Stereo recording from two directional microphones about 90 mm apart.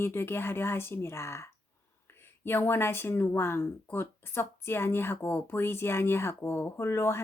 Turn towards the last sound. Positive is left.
turn(degrees=30)  # may be behind; listen again after turning